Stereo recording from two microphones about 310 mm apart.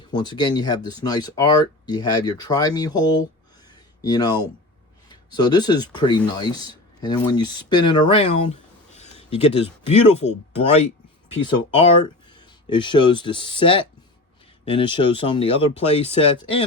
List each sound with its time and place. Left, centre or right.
0.1 s speech: centre
12.3 s speech: centre